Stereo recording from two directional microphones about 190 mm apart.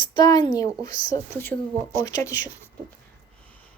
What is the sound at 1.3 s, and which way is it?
Child singing, 10° left (ahead or behind).